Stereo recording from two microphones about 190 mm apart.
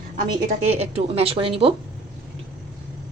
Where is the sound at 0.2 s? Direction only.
40° right (ahead or behind).